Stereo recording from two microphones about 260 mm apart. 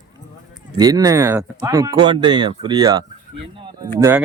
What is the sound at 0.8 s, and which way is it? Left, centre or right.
Speech, centre.